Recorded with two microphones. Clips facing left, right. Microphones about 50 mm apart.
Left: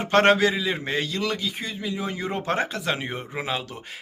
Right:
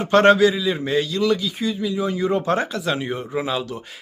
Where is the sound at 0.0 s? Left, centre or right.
Left.